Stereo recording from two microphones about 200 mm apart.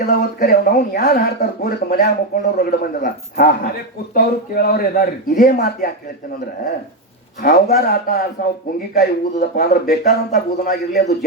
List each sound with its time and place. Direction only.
0.1 s speech: 45° left (ahead or behind)
7.4 s speech: 50° left (ahead or behind)